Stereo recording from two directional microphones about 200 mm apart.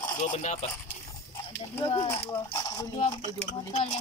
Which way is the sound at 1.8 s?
25° left (ahead or behind).